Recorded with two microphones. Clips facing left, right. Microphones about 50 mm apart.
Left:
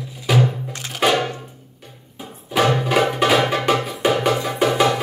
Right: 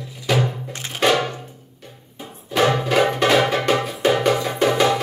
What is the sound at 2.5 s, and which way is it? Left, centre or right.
Music, centre.